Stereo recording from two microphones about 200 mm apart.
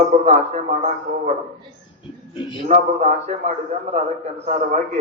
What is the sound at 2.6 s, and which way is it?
A man's voice, 35° right (ahead or behind).